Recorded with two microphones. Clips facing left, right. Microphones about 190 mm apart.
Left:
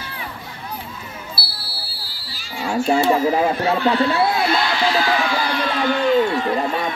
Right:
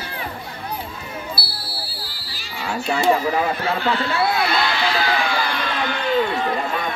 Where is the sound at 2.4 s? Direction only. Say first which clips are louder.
Left 5 dB; 45° left (ahead or behind).